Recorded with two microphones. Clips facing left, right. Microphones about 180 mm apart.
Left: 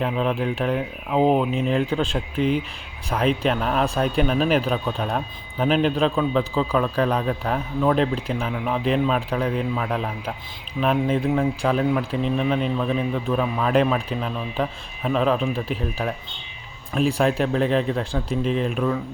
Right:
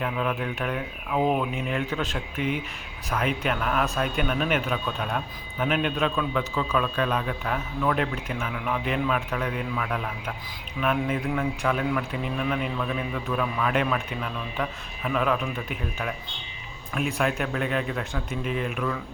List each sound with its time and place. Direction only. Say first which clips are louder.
0.0 s speech: left 5 dB; 30° left (ahead or behind)